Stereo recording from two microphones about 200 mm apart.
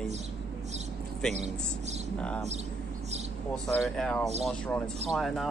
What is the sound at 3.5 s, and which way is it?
Speech, centre (ahead or behind).